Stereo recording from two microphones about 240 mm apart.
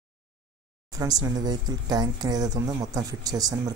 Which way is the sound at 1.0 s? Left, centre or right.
Centre.